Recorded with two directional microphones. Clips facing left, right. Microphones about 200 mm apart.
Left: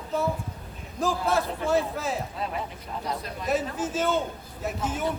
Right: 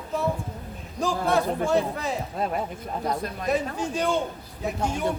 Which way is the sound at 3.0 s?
50° right (ahead or behind).